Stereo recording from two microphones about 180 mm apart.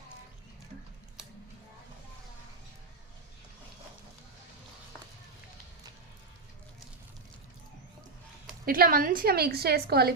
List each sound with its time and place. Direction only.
8.6 s a woman's voice: 55° right (ahead or behind)